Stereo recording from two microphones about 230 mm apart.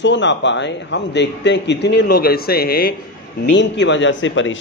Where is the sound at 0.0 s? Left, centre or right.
Left.